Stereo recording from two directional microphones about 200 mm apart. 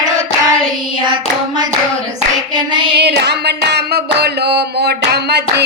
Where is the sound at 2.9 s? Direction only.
55° right (ahead or behind).